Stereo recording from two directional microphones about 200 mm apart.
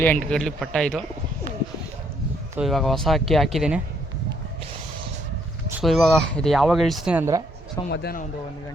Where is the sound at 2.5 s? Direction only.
Centre (ahead or behind).